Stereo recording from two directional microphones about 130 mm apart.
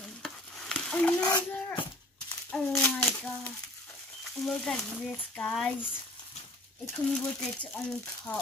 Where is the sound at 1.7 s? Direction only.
40° left (ahead or behind).